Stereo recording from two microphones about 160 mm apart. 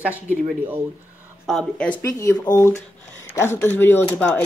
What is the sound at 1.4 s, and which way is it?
Speech, 5° left (ahead or behind).